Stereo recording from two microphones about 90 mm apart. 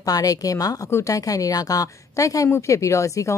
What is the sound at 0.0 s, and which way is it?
A woman's voice, 40° left (ahead or behind).